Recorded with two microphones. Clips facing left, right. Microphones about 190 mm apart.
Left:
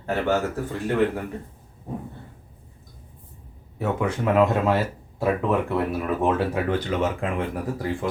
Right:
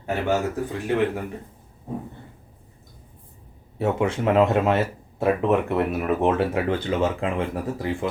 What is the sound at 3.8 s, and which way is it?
Speech, 25° right (ahead or behind).